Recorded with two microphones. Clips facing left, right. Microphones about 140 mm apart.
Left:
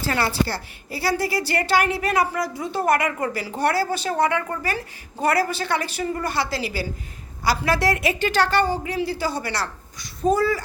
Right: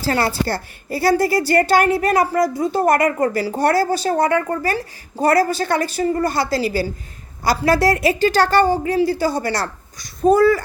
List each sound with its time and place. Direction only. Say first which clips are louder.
0.0 s a woman's voice: right 4 dB; 35° right (ahead or behind)
0.4 s a woman's voice: right 6 dB; 50° right (ahead or behind)